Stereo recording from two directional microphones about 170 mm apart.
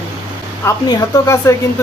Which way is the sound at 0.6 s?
15° left (ahead or behind).